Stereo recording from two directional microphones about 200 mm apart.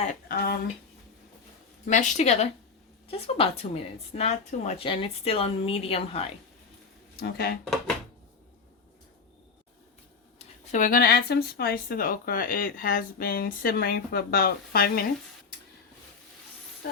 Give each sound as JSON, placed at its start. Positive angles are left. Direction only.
{"t": 0.0, "sound": "speech", "side_deg": 45}
{"t": 1.9, "sound": "a woman's voice", "side_deg": 35}
{"t": 7.2, "sound": "speech", "side_deg": 50}
{"t": 10.3, "sound": "speech", "side_deg": 40}